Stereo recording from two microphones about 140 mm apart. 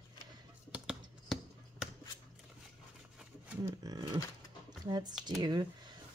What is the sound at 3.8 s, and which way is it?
Speech, 25° right (ahead or behind).